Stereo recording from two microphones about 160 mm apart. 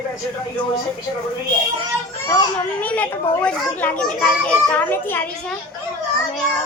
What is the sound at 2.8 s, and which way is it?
A child's voice, 10° left (ahead or behind).